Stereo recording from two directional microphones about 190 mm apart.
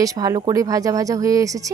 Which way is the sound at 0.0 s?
20° right (ahead or behind).